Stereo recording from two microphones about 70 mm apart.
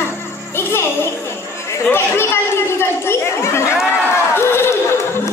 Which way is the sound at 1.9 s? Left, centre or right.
Left.